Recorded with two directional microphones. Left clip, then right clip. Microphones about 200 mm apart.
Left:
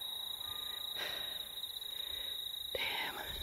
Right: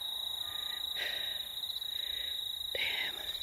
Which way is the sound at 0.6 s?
25° left (ahead or behind).